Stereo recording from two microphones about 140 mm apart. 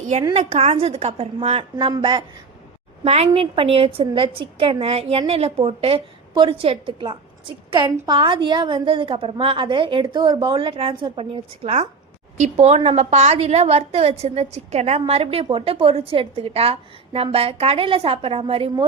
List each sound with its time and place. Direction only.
0.3 s a woman's voice: 45° right (ahead or behind)
3.0 s a woman's voice: 50° right (ahead or behind)